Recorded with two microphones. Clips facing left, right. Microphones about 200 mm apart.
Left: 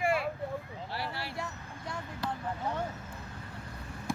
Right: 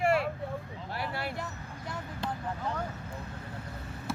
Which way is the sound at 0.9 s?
50° right (ahead or behind).